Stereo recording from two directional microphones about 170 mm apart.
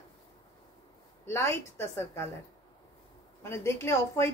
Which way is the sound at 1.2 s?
15° left (ahead or behind).